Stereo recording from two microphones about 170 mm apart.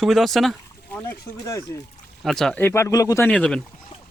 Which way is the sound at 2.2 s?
Centre (ahead or behind).